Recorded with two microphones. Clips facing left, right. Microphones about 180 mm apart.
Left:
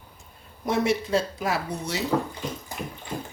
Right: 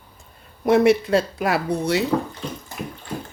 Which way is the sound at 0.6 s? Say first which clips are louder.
Right 8 dB; 65° right (ahead or behind).